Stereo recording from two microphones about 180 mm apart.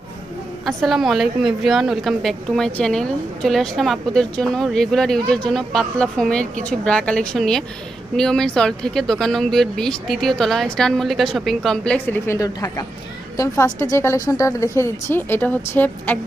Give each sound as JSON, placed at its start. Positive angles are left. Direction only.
{"t": 0.6, "sound": "a woman's voice", "side_deg": 0}